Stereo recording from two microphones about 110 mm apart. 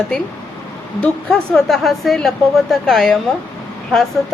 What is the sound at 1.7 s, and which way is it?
A woman's voice, centre (ahead or behind).